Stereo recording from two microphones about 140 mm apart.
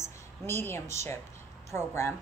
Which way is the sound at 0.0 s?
15° left (ahead or behind).